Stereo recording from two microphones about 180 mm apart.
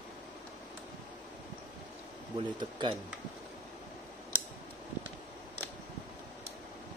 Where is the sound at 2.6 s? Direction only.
25° right (ahead or behind).